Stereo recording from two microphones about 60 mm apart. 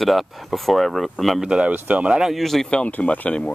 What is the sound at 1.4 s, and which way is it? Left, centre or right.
Speech, centre.